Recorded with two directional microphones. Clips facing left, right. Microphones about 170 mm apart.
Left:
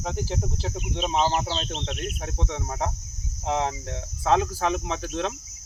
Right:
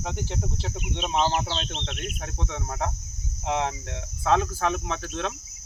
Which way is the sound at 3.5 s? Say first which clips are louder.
Left 1 dB; 35° left (ahead or behind).